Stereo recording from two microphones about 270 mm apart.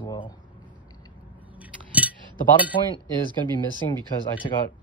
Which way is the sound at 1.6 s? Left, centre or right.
Centre.